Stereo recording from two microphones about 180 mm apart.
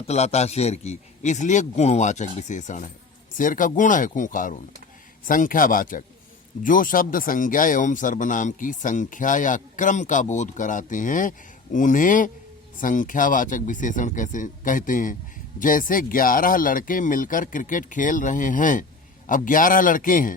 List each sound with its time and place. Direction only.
0.1 s speech: 35° left (ahead or behind)